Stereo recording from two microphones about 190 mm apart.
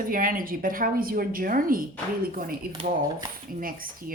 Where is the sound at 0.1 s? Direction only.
45° right (ahead or behind).